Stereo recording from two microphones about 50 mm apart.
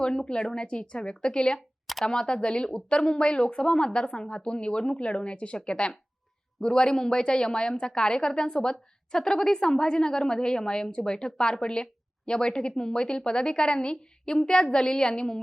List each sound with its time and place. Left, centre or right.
0.0 s a woman's voice: centre
1.5 s a sound: centre
2.0 s a woman's voice: centre